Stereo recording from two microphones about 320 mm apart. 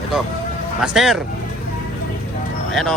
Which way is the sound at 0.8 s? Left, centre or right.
Centre.